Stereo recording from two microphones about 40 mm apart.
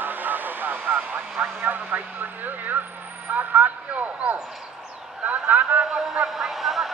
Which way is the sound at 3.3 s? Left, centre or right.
Right.